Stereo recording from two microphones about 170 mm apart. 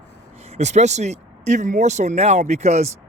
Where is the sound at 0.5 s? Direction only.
40° right (ahead or behind).